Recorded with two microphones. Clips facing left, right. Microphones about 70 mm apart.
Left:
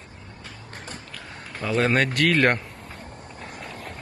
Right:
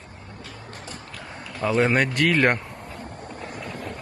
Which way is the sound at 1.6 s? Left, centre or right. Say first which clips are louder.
Right 1 dB; centre.